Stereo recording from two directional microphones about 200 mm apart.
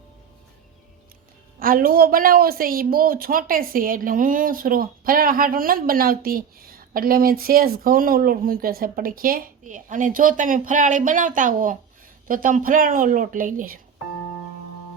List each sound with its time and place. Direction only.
1.5 s speech: 45° right (ahead or behind)